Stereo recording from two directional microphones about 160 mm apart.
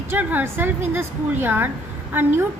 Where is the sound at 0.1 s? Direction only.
10° right (ahead or behind).